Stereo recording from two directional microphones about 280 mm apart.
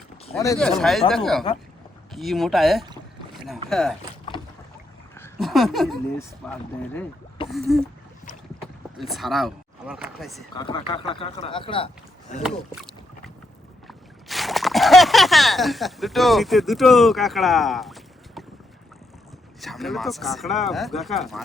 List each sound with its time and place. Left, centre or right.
0.3 s speech: centre
5.1 s speech: centre
10.5 s speech: centre
12.4 s rowboat: centre
13.8 s a sound: centre
19.6 s speech: centre